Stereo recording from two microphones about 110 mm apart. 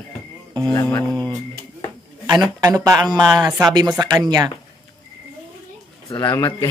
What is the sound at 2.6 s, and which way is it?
Speech, 35° right (ahead or behind).